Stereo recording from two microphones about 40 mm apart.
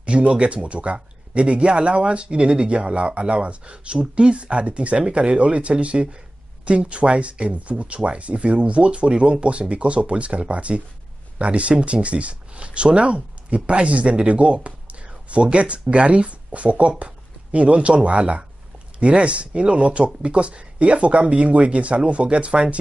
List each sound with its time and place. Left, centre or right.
0.0 s speech: right